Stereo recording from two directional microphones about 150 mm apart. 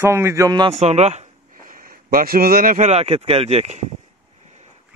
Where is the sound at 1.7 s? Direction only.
70° right (ahead or behind).